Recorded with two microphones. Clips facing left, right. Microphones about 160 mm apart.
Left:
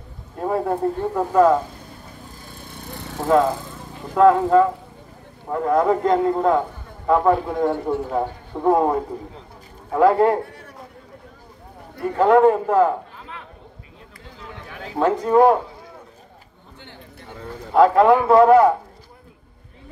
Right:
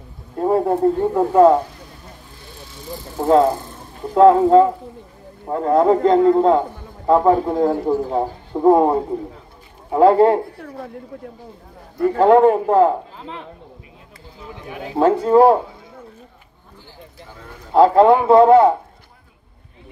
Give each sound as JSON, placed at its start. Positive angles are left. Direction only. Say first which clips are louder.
{"t": 0.4, "sound": "a man's voice", "louder": "right 5 dB", "side_deg": -20}
{"t": 2.5, "sound": "vehicle", "louder": "right 4 dB", "side_deg": 55}
{"t": 3.3, "sound": "a man's voice", "louder": "right 3 dB", "side_deg": -30}
{"t": 12.3, "sound": "a man's voice", "louder": "right 2 dB", "side_deg": -25}
{"t": 15.0, "sound": "a man's voice", "louder": "right 3 dB", "side_deg": -30}
{"t": 17.7, "sound": "a man's voice", "louder": "right 2 dB", "side_deg": -30}